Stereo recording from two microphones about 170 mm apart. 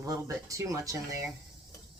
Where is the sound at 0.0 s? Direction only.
20° right (ahead or behind).